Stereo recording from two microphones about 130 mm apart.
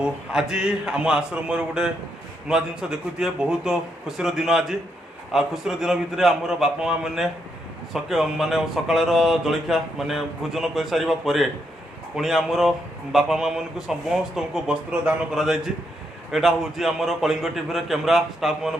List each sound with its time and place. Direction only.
0.0 s speech: 5° right (ahead or behind)